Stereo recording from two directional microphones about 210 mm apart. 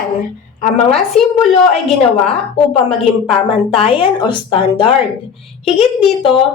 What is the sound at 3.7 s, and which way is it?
A woman's voice, 25° left (ahead or behind).